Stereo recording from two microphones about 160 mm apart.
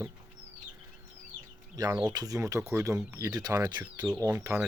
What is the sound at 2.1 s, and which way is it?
Speech, 20° right (ahead or behind).